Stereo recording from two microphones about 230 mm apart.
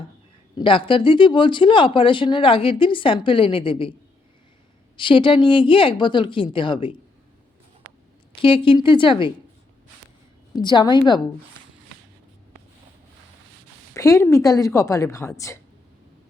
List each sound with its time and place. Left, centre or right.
0.5 s speech: left
4.9 s speech: left
8.4 s speech: left
10.5 s speech: centre
13.9 s a woman's voice: centre